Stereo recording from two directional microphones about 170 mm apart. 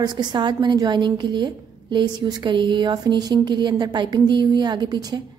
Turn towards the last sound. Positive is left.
turn(degrees=-25)  # may be behind; listen again after turning